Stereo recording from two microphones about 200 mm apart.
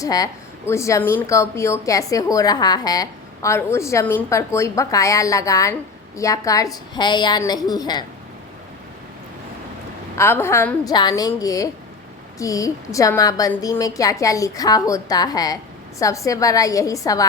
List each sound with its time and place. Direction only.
0.0 s a woman's voice: 20° left (ahead or behind)
10.2 s a woman's voice: 15° left (ahead or behind)